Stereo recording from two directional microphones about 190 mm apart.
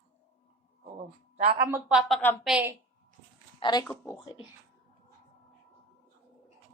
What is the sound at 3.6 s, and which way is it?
Speech, 20° left (ahead or behind).